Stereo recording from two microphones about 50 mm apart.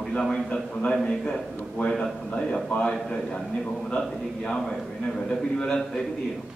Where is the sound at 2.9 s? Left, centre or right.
Centre.